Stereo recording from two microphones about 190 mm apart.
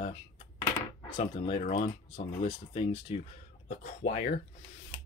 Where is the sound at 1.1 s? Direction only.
30° left (ahead or behind).